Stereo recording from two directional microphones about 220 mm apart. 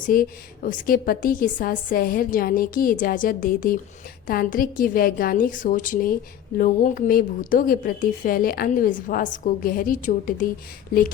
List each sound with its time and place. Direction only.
0.0 s a woman's voice: 40° left (ahead or behind)